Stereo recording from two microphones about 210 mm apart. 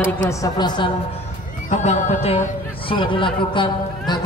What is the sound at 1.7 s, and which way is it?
Speech, 35° left (ahead or behind).